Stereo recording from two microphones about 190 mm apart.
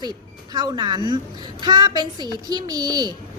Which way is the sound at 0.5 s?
20° right (ahead or behind).